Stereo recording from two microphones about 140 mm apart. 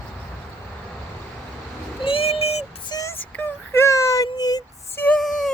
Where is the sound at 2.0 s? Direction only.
45° left (ahead or behind).